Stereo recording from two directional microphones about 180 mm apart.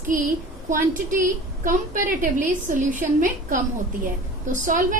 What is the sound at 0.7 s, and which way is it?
A woman's voice, 50° right (ahead or behind).